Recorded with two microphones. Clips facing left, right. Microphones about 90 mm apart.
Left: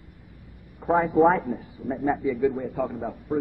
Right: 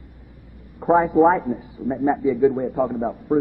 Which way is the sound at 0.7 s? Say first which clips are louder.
Right 5 dB; 35° right (ahead or behind).